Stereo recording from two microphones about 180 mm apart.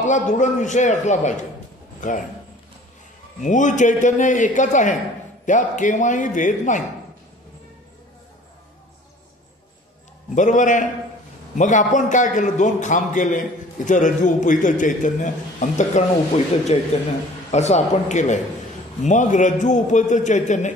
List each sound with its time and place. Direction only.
0.0 s a man's voice: 45° left (ahead or behind)
3.4 s a man's voice: 45° left (ahead or behind)
10.3 s a man's voice: 45° left (ahead or behind)